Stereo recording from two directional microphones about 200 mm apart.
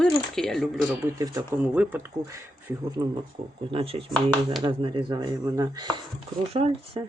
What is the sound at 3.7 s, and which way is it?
Speech, 25° right (ahead or behind).